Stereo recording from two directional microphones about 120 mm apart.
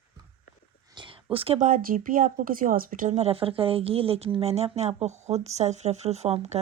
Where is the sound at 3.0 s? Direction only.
65° right (ahead or behind).